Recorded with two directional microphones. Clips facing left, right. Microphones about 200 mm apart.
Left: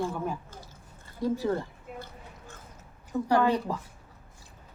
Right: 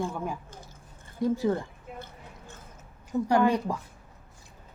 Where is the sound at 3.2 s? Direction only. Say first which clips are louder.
Right 1 dB; 15° right (ahead or behind).